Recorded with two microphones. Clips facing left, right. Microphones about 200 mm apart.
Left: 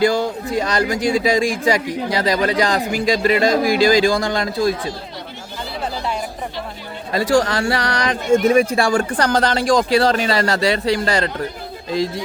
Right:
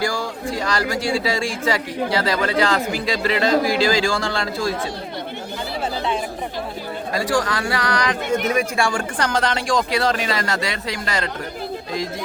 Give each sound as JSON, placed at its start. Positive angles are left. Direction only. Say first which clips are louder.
{"t": 0.0, "sound": "speech", "louder": "left 7 dB", "side_deg": 20}
{"t": 7.3, "sound": "speech", "louder": "left 6 dB", "side_deg": 25}